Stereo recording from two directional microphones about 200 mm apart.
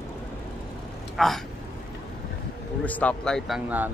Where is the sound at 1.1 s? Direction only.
Centre (ahead or behind).